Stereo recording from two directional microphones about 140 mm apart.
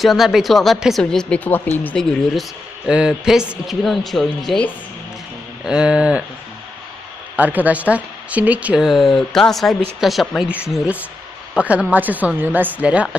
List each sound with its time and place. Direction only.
0.0 s speech: centre (ahead or behind)
5.6 s speech: 5° right (ahead or behind)
7.3 s speech: 10° right (ahead or behind)